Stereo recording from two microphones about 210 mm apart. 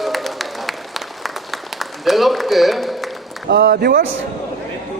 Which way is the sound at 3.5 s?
45° right (ahead or behind).